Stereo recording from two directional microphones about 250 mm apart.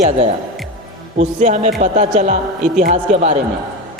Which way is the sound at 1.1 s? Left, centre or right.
Right.